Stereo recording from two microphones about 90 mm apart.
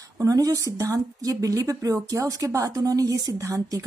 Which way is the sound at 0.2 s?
40° right (ahead or behind).